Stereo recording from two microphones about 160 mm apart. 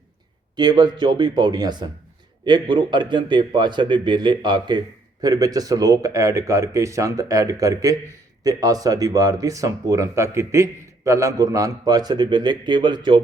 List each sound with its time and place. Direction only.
0.5 s speech: 25° right (ahead or behind)